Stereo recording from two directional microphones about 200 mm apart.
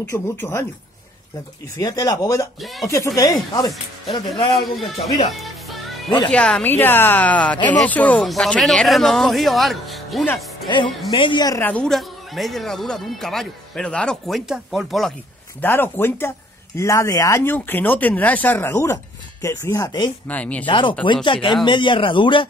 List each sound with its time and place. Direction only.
0.1 s speech: 10° left (ahead or behind)
1.8 s speech: 20° left (ahead or behind)
2.6 s a man's voice: centre (ahead or behind)
3.5 s speech: 20° left (ahead or behind)
4.3 s a man's voice: centre (ahead or behind)
6.0 s speech: 20° left (ahead or behind)
6.3 s a man's voice: 5° left (ahead or behind)
10.7 s a man's voice: 20° left (ahead or behind)
20.2 s speech: 5° left (ahead or behind)
20.6 s speech: 25° left (ahead or behind)